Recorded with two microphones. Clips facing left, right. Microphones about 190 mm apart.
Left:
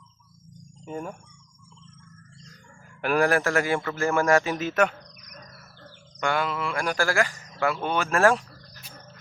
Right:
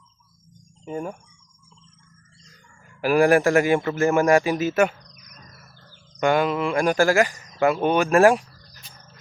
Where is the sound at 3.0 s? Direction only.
10° right (ahead or behind).